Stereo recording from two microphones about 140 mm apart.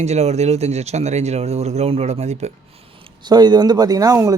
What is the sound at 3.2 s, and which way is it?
Speech, 30° right (ahead or behind).